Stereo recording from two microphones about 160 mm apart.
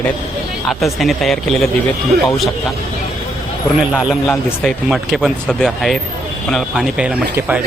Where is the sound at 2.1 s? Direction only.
75° right (ahead or behind).